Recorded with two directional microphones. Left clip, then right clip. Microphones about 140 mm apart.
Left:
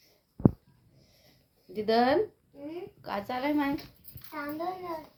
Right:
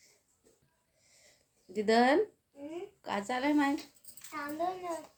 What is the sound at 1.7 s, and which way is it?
Speech, 25° right (ahead or behind).